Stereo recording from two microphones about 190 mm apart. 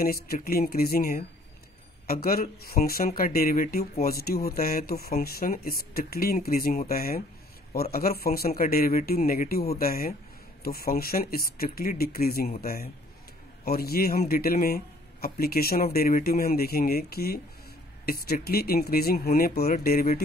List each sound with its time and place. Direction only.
0.0 s speech: 50° left (ahead or behind)
2.2 s speech: 50° left (ahead or behind)